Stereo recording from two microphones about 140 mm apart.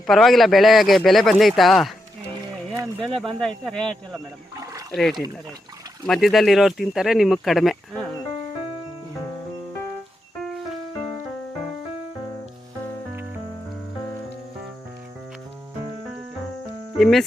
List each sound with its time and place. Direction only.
0.1 s speech: centre (ahead or behind)
3.0 s speech: 5° left (ahead or behind)
4.5 s a sound: 25° right (ahead or behind)
4.9 s speech: centre (ahead or behind)
17.0 s speech: centre (ahead or behind)